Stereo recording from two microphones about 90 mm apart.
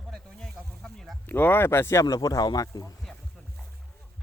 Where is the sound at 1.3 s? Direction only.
20° left (ahead or behind); by 2.8 s 45° left (ahead or behind).